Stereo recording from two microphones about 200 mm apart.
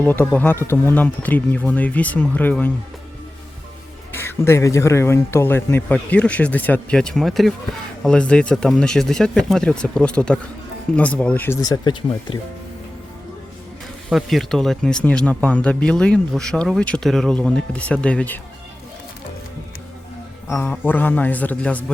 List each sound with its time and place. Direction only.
0.0 s a man's voice: 10° left (ahead or behind)
4.1 s a man's voice: 10° left (ahead or behind)
14.1 s speech: centre (ahead or behind)
20.5 s a man's voice: 10° left (ahead or behind)